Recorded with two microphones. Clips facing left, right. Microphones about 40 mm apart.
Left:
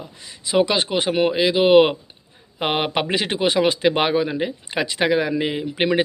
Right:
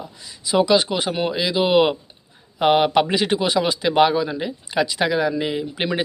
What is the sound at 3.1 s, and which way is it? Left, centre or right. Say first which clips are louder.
Speech: right 1 dB; left.